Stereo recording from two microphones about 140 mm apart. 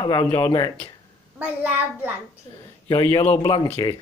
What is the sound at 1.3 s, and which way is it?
Speech, 10° right (ahead or behind).